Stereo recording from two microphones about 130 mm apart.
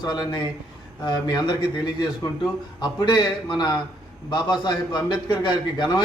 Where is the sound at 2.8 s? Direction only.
35° left (ahead or behind).